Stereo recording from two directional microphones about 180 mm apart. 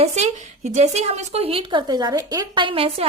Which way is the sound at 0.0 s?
40° right (ahead or behind).